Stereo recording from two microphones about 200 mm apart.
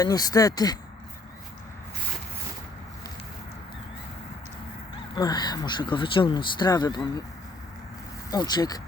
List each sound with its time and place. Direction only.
0.0 s speech: 20° left (ahead or behind)
5.1 s speech: 20° left (ahead or behind)
8.3 s speech: 20° left (ahead or behind)